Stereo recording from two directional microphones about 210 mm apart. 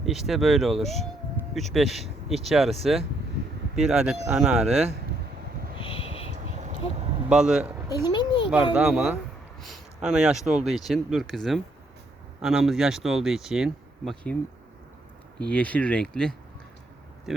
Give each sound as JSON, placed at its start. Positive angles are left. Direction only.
{"t": 0.0, "sound": "speech", "side_deg": 0}
{"t": 3.8, "sound": "speech", "side_deg": -5}
{"t": 5.7, "sound": "a sound", "side_deg": 25}
{"t": 7.3, "sound": "speech", "side_deg": -5}
{"t": 7.9, "sound": "a sound", "side_deg": 20}
{"t": 8.7, "sound": "speech", "side_deg": -5}
{"t": 10.4, "sound": "speech", "side_deg": -35}
{"t": 10.7, "sound": "speech", "side_deg": 0}
{"t": 15.4, "sound": "speech", "side_deg": 5}